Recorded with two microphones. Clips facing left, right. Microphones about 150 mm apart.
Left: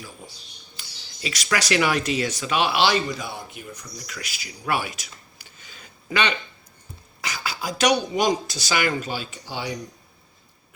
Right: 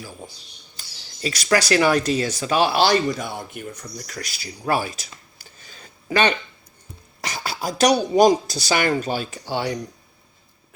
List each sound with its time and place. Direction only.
1.2 s speech: 35° right (ahead or behind)
4.0 s speech: 40° right (ahead or behind); by 9.7 s 60° right (ahead or behind)